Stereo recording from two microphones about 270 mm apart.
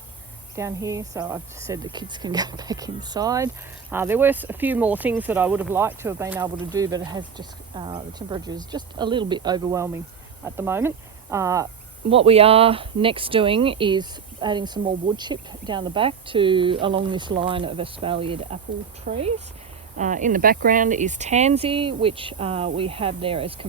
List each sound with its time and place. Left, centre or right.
0.5 s speech: centre